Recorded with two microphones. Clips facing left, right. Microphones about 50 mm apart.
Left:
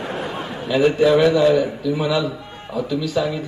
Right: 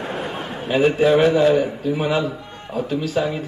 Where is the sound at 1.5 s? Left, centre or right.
Right.